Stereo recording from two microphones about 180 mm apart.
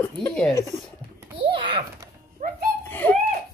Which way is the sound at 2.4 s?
45° right (ahead or behind).